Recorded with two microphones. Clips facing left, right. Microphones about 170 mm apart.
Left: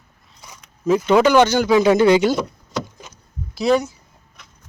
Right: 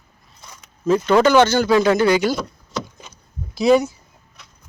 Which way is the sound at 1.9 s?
25° left (ahead or behind).